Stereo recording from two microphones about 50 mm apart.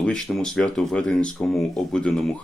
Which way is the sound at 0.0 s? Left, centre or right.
Centre.